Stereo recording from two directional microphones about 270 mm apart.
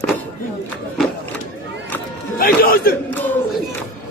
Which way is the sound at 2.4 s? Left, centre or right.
Left.